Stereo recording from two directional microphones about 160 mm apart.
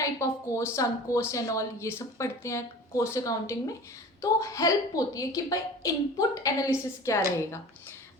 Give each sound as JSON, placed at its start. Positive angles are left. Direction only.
{"t": 0.0, "sound": "a woman's voice", "side_deg": 20}